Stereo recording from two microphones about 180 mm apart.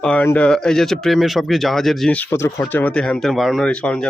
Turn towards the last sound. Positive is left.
turn(degrees=5)  # may be behind; listen again after turning